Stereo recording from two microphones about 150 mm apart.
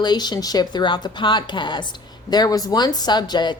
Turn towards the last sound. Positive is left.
turn(degrees=30)  # may be behind; listen again after turning